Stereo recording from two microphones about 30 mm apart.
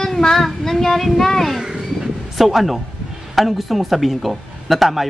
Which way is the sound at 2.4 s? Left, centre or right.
Centre.